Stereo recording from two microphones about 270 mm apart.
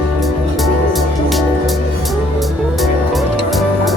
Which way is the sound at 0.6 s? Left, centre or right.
Centre.